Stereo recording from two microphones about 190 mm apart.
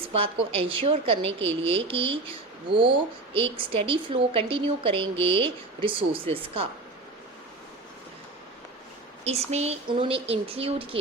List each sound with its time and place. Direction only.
0.0 s speech: 30° right (ahead or behind)
9.2 s speech: 35° right (ahead or behind)